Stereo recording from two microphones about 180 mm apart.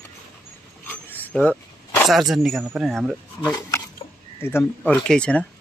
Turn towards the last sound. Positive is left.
turn(degrees=5)  # may be behind; listen again after turning